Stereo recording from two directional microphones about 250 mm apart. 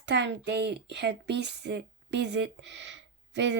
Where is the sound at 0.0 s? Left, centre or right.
Right.